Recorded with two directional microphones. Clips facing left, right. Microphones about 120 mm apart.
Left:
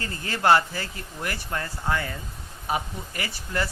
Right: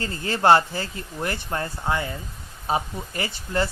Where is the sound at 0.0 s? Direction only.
30° right (ahead or behind).